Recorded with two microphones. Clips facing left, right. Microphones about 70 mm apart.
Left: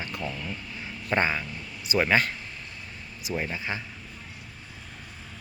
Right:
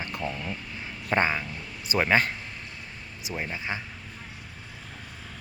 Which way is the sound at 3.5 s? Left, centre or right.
Right.